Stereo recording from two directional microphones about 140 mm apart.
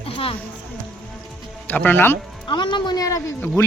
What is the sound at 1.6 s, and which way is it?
Speech, 15° left (ahead or behind).